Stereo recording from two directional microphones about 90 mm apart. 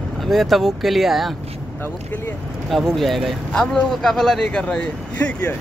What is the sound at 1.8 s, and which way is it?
Speech, 25° left (ahead or behind).